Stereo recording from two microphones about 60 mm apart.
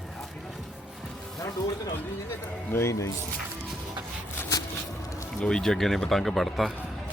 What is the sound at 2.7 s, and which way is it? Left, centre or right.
Speech, left.